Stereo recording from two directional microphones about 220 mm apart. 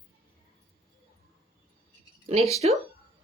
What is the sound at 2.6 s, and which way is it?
Speech, 30° right (ahead or behind).